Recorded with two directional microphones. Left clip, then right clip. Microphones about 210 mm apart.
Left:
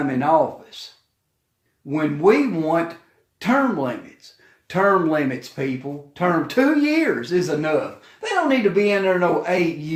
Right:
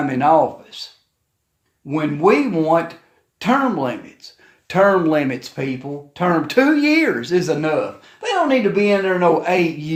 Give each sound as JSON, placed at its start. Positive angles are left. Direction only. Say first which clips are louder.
{"t": 0.1, "sound": "a man's voice", "louder": "right 4 dB", "side_deg": -35}
{"t": 1.9, "sound": "speech", "louder": "right 2 dB", "side_deg": -35}